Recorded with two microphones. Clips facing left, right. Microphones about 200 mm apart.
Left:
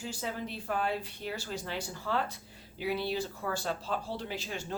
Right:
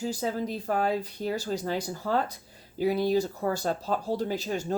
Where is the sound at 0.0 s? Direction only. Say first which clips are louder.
Right 8 dB; 40° right (ahead or behind).